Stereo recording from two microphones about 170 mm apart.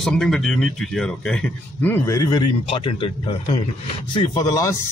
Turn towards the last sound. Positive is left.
turn(degrees=20)  # may be behind; listen again after turning